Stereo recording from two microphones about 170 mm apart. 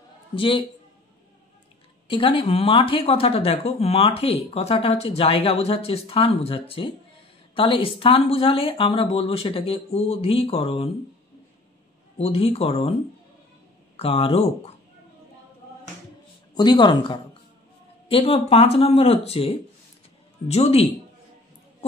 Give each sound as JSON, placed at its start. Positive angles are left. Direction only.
{"t": 0.4, "sound": "speech", "side_deg": 30}
{"t": 2.0, "sound": "speech", "side_deg": 30}
{"t": 12.2, "sound": "speech", "side_deg": 35}
{"t": 13.9, "sound": "speech", "side_deg": 35}
{"t": 16.5, "sound": "speech", "side_deg": 25}